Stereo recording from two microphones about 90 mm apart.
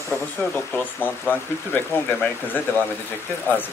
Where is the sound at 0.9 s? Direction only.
20° left (ahead or behind).